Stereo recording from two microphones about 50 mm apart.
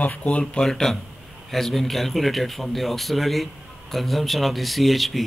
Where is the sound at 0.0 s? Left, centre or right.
Left.